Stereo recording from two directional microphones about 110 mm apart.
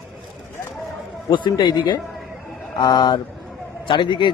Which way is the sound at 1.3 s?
45° left (ahead or behind).